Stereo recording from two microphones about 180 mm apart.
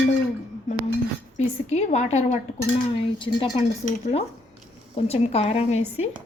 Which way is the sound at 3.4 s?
25° left (ahead or behind).